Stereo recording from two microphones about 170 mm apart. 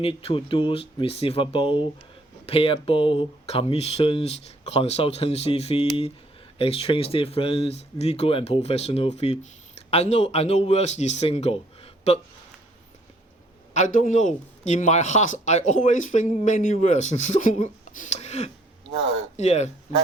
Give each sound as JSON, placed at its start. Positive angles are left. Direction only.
{"t": 0.0, "sound": "speech", "side_deg": 35}
{"t": 13.7, "sound": "speech", "side_deg": 45}